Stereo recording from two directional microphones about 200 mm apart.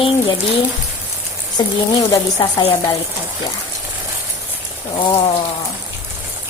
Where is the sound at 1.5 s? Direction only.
15° left (ahead or behind).